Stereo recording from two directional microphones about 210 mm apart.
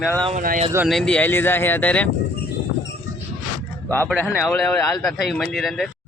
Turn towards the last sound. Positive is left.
turn(degrees=0)  # may be behind; listen again after turning